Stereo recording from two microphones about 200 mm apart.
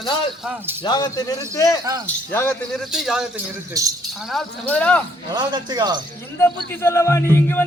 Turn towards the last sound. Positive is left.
turn(degrees=10)  # may be behind; listen again after turning